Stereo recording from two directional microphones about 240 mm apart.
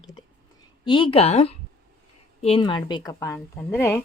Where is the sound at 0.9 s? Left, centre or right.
Left.